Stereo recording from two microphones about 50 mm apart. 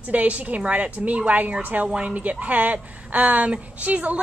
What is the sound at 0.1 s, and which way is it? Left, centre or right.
A woman's voice, right.